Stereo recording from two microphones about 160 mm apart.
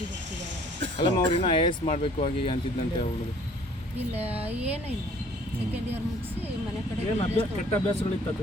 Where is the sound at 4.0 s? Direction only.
40° right (ahead or behind).